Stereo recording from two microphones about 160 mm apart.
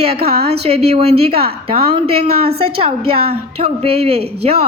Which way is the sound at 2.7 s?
35° right (ahead or behind).